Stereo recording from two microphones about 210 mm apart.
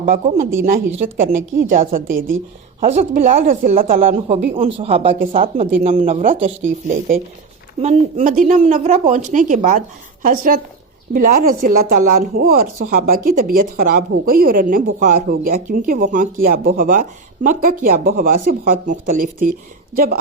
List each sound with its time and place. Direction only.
0.0 s speech: 40° right (ahead or behind)
4.1 s speech: 25° right (ahead or behind)